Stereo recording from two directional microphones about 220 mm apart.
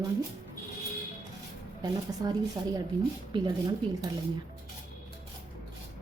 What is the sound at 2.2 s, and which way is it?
A woman's voice, 20° right (ahead or behind).